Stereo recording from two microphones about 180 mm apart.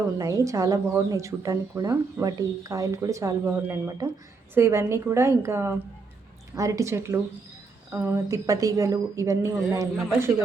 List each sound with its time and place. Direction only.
0.2 s speech: 20° right (ahead or behind)